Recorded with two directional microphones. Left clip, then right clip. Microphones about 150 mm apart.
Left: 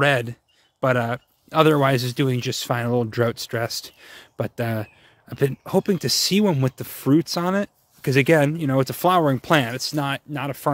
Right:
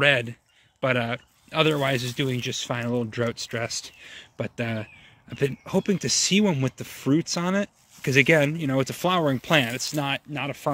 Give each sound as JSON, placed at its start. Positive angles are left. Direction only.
{"t": 0.0, "sound": "speech", "side_deg": 40}